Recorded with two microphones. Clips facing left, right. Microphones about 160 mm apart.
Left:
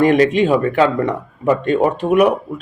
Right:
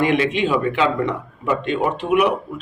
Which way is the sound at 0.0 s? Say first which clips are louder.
Left 6 dB; 45° left (ahead or behind).